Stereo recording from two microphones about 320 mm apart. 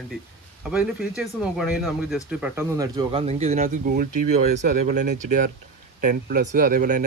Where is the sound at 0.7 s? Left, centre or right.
Centre; by 4.1 s right.